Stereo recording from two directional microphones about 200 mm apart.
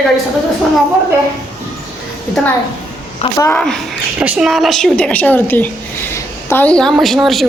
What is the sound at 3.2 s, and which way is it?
Speech, 15° left (ahead or behind).